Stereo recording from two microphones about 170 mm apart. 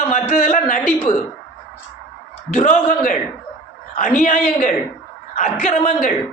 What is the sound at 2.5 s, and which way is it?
Speech, 45° left (ahead or behind).